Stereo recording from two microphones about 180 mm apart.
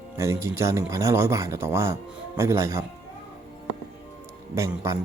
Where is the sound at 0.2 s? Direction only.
15° right (ahead or behind).